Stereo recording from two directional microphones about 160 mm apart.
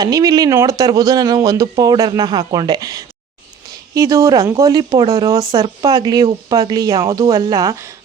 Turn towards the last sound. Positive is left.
turn(degrees=-25)  # may be behind; listen again after turning